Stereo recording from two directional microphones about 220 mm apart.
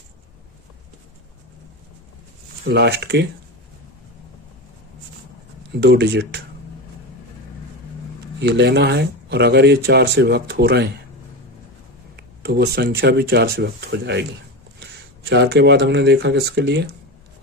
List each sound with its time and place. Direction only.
2.6 s speech: 50° right (ahead or behind)
5.7 s speech: 50° right (ahead or behind)
8.4 s speech: 50° right (ahead or behind)
12.1 s speech: 45° right (ahead or behind)
15.3 s speech: 50° right (ahead or behind)